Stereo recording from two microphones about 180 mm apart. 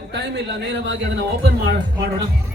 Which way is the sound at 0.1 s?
75° right (ahead or behind).